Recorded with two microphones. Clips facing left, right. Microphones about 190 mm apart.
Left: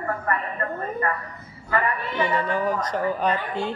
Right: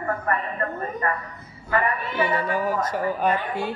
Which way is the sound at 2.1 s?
10° right (ahead or behind).